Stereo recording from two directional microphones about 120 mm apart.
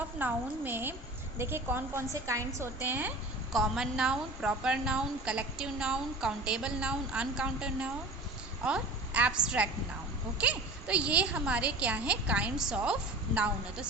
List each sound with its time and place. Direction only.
0.2 s a woman's voice: 15° right (ahead or behind)
3.5 s a woman's voice: 5° right (ahead or behind)